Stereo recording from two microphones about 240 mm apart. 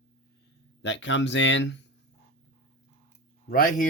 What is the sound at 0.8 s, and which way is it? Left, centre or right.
Speech, left.